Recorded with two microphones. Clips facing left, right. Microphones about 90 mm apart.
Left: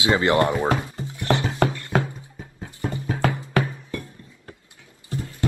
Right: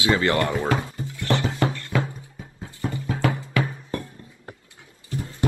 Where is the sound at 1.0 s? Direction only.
20° left (ahead or behind).